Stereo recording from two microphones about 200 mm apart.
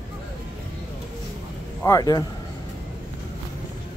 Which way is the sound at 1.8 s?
20° left (ahead or behind).